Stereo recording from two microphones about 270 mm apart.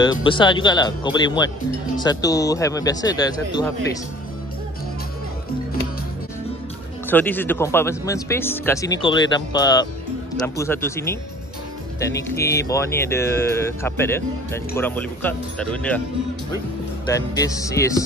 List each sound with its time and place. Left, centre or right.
0.0 s speech: centre
7.1 s speech: centre
17.1 s speech: centre